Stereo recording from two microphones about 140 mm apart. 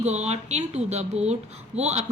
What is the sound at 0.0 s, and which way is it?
A woman's voice, 55° right (ahead or behind).